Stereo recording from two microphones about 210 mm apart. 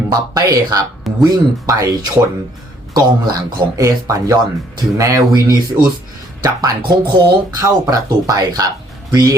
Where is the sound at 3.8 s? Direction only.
15° right (ahead or behind).